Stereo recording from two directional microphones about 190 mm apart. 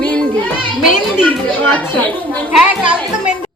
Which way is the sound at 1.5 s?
10° left (ahead or behind).